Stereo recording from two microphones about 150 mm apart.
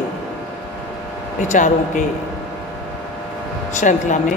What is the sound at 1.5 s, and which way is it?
Speech, 55° left (ahead or behind).